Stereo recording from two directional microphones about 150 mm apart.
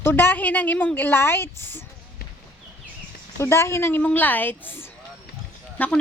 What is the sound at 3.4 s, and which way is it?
A woman's voice, 20° left (ahead or behind).